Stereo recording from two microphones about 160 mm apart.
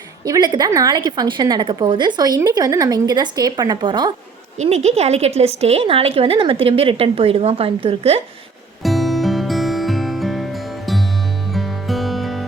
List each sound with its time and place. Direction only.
0.3 s a woman's voice: 25° right (ahead or behind)
4.5 s a woman's voice: 45° right (ahead or behind)
8.8 s music: centre (ahead or behind)